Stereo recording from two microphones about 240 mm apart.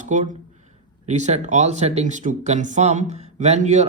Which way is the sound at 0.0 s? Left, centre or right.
Right.